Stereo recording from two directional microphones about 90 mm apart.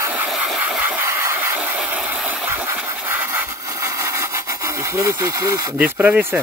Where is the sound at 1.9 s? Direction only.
15° right (ahead or behind).